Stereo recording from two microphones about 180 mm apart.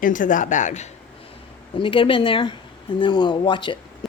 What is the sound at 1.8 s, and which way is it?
Speech, 30° left (ahead or behind).